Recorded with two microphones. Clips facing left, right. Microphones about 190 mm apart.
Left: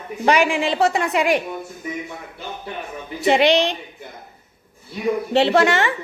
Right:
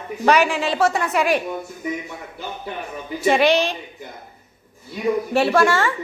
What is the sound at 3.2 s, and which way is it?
Speech, 15° left (ahead or behind).